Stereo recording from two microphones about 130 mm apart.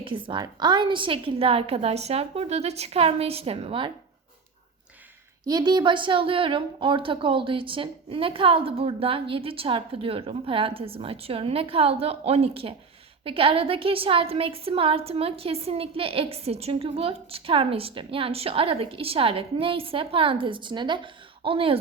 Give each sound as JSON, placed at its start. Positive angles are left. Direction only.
{"t": 0.0, "sound": "a woman's voice", "side_deg": -40}
{"t": 5.5, "sound": "a woman's voice", "side_deg": -30}